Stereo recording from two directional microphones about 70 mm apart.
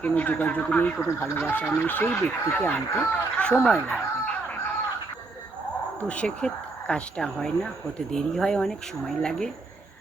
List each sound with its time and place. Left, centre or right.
0.0 s speech: left
3.9 s a sound: centre
6.1 s speech: centre